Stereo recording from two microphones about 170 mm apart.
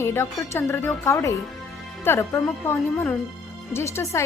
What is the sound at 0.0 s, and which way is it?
Speech, 15° left (ahead or behind).